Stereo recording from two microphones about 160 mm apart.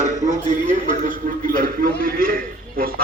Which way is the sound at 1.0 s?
60° right (ahead or behind).